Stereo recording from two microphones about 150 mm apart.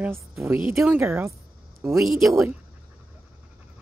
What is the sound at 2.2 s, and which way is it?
Speech, 20° right (ahead or behind).